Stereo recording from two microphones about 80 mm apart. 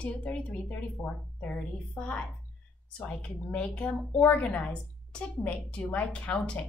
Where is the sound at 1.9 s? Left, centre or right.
Centre.